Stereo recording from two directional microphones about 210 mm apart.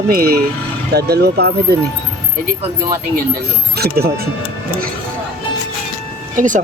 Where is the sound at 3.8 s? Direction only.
50° right (ahead or behind).